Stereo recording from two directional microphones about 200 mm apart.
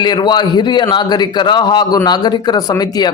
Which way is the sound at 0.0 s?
20° left (ahead or behind).